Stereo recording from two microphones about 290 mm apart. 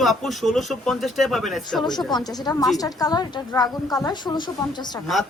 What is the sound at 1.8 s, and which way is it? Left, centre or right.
A woman's voice, centre.